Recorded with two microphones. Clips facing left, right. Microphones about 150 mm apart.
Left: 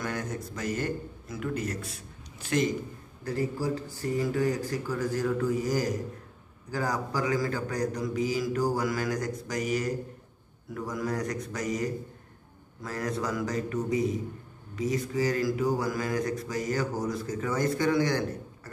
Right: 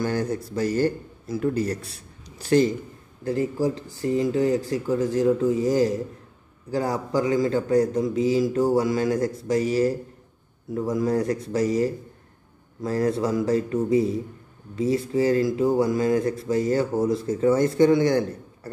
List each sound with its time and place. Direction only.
0.0 s a man's voice: 30° right (ahead or behind)
3.3 s speech: 20° right (ahead or behind)